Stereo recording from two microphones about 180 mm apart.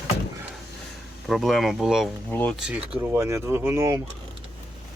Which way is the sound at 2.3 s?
10° left (ahead or behind).